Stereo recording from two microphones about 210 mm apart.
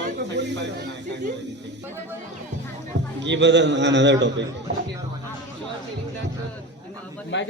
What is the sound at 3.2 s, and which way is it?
A woman's voice, 55° right (ahead or behind).